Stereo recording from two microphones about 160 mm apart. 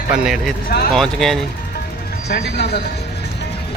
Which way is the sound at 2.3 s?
90° left.